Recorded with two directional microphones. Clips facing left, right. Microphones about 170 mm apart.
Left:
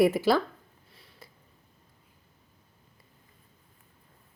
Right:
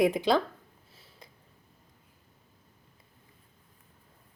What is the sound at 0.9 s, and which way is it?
Sniff, centre (ahead or behind).